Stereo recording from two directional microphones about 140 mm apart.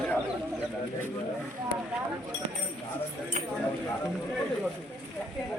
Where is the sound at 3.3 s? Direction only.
60° right (ahead or behind).